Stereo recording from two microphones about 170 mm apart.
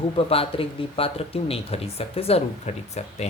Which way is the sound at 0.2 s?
35° left (ahead or behind).